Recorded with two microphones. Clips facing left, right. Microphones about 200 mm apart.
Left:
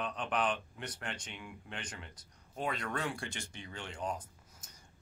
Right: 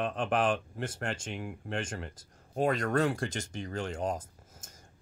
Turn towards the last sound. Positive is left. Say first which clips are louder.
# right 4 dB
turn(degrees=-45)  # may be behind; listen again after turning